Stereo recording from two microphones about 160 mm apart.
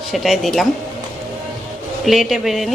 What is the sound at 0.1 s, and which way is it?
Speech, centre (ahead or behind).